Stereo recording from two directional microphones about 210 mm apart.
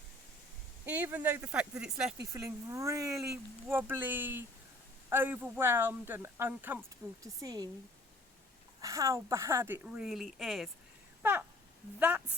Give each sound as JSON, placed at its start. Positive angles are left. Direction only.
{"t": 0.9, "sound": "speech", "side_deg": -5}
{"t": 2.3, "sound": "speech", "side_deg": -15}
{"t": 8.8, "sound": "speech", "side_deg": -15}
{"t": 11.2, "sound": "a sound", "side_deg": -10}
{"t": 11.9, "sound": "a woman's voice", "side_deg": -5}